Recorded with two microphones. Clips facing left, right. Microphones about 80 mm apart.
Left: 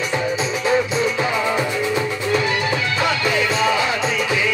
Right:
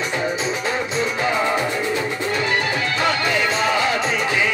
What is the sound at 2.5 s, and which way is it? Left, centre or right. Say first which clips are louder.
Music: even; right.